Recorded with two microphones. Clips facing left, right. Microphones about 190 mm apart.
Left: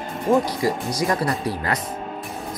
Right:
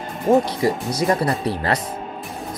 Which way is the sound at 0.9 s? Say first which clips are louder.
Right 3 dB; 25° right (ahead or behind).